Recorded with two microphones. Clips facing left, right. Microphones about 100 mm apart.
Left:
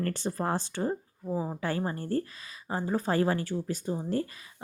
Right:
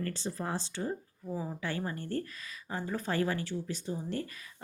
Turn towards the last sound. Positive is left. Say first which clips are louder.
# left 5 dB
turn(degrees=40)  # may be behind; listen again after turning